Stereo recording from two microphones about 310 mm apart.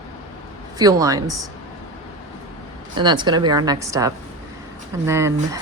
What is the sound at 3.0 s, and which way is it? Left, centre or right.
Speech, centre.